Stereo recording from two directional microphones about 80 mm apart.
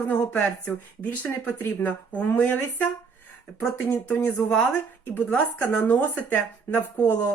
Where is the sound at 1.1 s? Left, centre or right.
Centre.